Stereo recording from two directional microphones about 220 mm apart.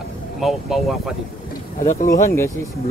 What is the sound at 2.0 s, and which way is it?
Speech, 40° left (ahead or behind).